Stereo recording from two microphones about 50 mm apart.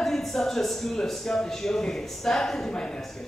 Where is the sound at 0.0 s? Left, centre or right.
Centre.